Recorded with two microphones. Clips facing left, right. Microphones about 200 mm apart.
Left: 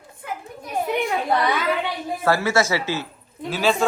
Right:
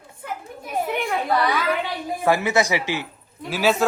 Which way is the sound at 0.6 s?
Centre (ahead or behind).